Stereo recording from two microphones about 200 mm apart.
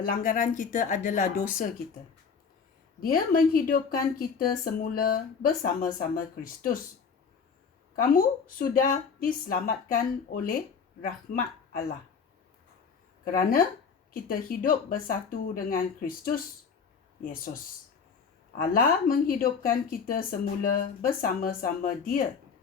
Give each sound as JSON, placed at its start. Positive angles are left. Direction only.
{"t": 0.0, "sound": "speech", "side_deg": 45}
{"t": 3.0, "sound": "speech", "side_deg": 45}
{"t": 7.9, "sound": "speech", "side_deg": 45}
{"t": 13.2, "sound": "speech", "side_deg": 40}
{"t": 18.7, "sound": "speech", "side_deg": 45}